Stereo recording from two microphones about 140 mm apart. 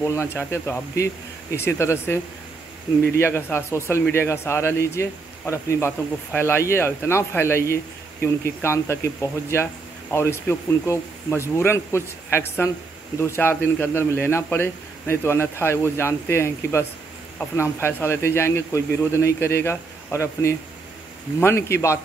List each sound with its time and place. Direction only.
0.0 s speech: 20° left (ahead or behind)
3.2 s speech: 15° left (ahead or behind)